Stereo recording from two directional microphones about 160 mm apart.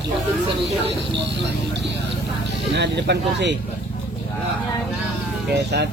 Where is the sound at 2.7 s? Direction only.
90° right.